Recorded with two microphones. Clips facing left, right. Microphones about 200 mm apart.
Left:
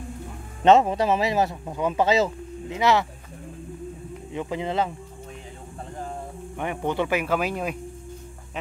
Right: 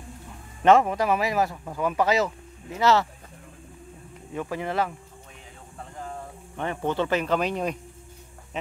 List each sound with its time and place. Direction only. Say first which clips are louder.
0.7 s speech: left 1 dB; 25° left (ahead or behind)
4.3 s speech: left 1 dB; 20° left (ahead or behind)
6.5 s speech: even; 15° left (ahead or behind)